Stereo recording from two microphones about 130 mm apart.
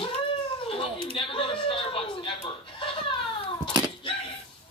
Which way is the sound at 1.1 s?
40° left (ahead or behind).